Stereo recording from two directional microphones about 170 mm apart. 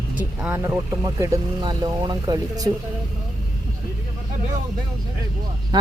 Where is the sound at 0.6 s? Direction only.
20° right (ahead or behind).